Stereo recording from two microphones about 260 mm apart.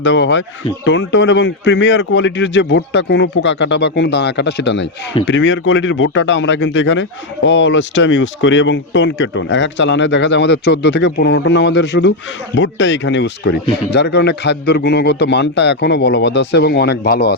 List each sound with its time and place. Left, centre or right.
0.0 s a man's voice: left